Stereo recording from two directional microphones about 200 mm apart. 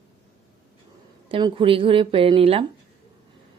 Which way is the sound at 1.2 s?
25° right (ahead or behind).